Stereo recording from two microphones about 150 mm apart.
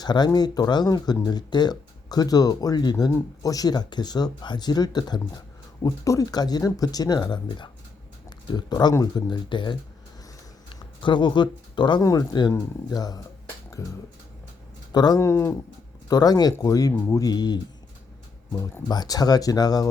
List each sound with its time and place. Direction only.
0.0 s speech: 30° left (ahead or behind)
10.8 s speech: 30° left (ahead or behind)
14.9 s speech: 25° left (ahead or behind)